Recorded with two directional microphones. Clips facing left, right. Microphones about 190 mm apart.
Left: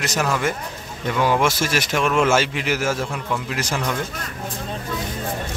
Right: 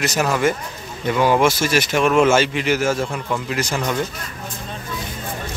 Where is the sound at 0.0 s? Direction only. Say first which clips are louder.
Right 3 dB; 5° right (ahead or behind).